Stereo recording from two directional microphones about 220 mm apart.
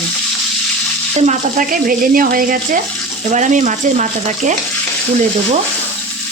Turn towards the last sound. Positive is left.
turn(degrees=-35)  # may be behind; listen again after turning